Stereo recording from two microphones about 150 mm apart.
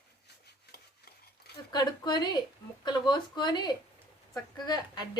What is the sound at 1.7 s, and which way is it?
Speech, 30° left (ahead or behind).